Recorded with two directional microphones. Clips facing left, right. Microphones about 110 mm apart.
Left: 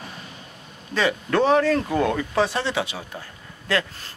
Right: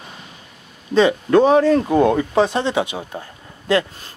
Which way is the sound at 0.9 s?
20° right (ahead or behind).